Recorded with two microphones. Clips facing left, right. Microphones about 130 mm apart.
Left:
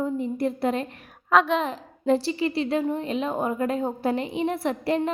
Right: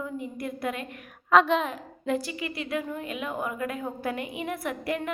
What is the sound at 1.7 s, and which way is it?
A woman's voice, 30° left (ahead or behind).